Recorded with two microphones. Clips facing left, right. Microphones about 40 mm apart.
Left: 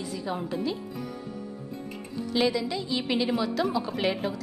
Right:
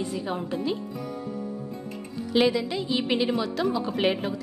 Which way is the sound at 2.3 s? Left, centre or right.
Centre.